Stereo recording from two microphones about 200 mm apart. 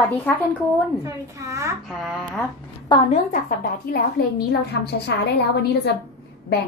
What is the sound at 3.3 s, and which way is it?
Speech, 45° left (ahead or behind).